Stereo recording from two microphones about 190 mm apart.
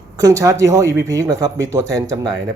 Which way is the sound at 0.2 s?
20° right (ahead or behind).